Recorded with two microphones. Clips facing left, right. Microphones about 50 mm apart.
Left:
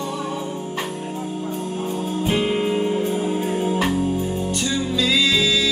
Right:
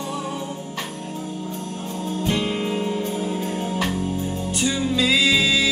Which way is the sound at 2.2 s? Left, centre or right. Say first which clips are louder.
Left 3 dB; centre.